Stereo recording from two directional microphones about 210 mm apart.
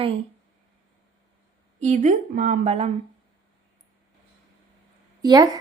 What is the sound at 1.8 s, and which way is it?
Speech, 35° right (ahead or behind).